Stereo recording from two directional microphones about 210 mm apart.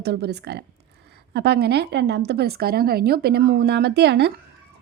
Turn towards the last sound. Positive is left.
turn(degrees=-55)  # may be behind; listen again after turning